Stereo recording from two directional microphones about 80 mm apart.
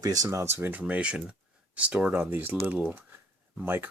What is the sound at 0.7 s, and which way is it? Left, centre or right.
Speech, centre.